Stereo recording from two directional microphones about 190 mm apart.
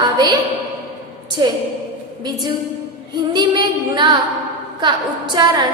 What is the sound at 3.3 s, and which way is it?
A woman's voice, 25° right (ahead or behind).